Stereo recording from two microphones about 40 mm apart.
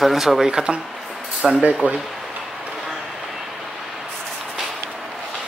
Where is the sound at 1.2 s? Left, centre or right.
Centre.